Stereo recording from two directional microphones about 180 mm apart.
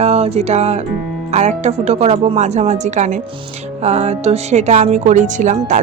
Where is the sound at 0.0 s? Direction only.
35° right (ahead or behind).